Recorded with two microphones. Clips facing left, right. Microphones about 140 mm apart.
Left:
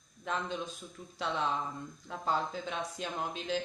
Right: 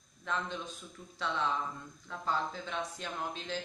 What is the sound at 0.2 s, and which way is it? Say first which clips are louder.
A man's voice: left 1 dB; 15° left (ahead or behind).